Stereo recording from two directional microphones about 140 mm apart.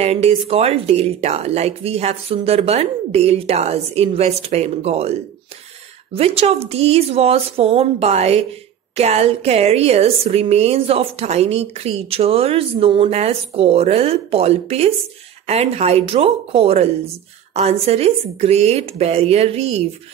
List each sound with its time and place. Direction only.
0.0 s a woman's voice: 45° right (ahead or behind)